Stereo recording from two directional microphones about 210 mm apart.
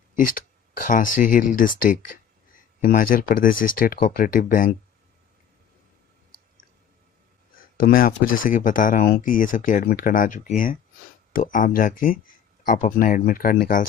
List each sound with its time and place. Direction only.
0.8 s speech: 40° left (ahead or behind)
7.8 s speech: 45° left (ahead or behind)